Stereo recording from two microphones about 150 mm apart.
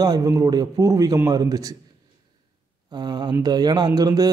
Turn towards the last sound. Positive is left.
turn(degrees=-25)  # may be behind; listen again after turning